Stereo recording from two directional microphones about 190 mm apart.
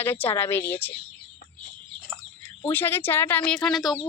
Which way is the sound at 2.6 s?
15° left (ahead or behind).